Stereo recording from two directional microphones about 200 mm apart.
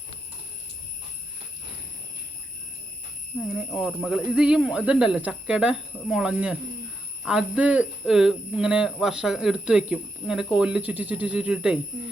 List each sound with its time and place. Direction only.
3.3 s speech: 10° left (ahead or behind)